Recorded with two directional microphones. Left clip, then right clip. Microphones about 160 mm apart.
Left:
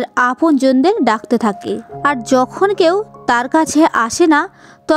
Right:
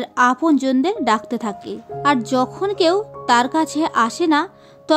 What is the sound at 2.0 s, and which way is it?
A woman's voice, 50° left (ahead or behind).